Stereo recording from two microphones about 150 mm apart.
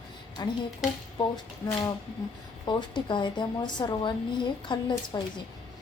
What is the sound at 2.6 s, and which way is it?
A woman's voice, 30° left (ahead or behind).